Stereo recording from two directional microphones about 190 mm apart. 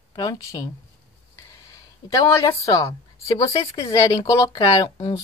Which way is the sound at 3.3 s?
20° left (ahead or behind).